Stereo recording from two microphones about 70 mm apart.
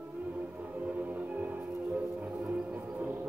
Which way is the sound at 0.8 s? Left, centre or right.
Right.